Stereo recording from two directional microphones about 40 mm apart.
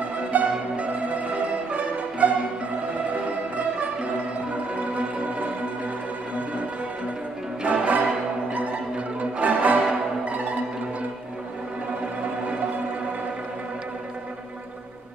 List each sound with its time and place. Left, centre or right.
0.3 s music: right
7.6 s music: right